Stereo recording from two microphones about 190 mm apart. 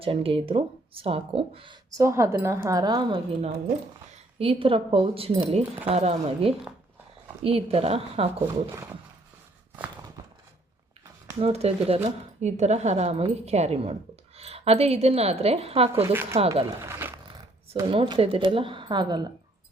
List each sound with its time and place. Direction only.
0.0 s speech: 30° right (ahead or behind)
11.3 s a woman's voice: 35° right (ahead or behind)
16.0 s speech: 10° right (ahead or behind)
17.7 s speech: 25° right (ahead or behind)